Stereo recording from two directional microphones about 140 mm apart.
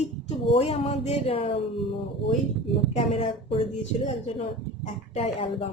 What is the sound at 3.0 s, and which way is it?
Speech, 40° left (ahead or behind).